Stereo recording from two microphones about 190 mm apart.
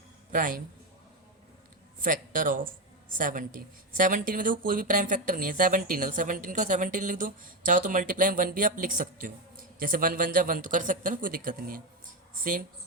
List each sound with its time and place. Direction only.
0.3 s a man's voice: 45° right (ahead or behind)
2.0 s speech: 45° right (ahead or behind)